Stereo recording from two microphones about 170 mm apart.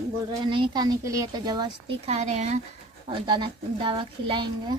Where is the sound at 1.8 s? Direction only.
40° right (ahead or behind).